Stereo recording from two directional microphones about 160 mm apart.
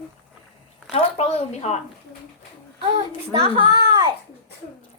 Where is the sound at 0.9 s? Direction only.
40° left (ahead or behind).